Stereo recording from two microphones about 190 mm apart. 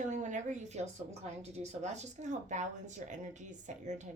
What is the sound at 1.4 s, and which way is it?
A woman's voice, 35° right (ahead or behind).